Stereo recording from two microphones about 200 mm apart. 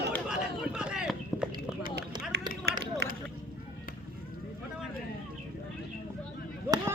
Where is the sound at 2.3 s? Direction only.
55° right (ahead or behind).